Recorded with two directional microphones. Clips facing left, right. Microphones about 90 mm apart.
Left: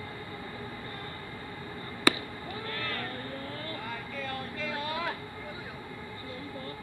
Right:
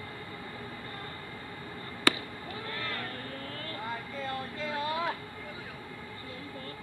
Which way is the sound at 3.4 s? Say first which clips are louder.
Left 2 dB; 20° left (ahead or behind).